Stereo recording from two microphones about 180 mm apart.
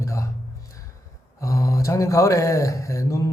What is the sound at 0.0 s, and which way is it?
Music, 15° left (ahead or behind).